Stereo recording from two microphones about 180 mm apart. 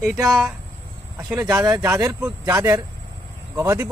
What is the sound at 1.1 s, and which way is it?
Speech, 5° right (ahead or behind).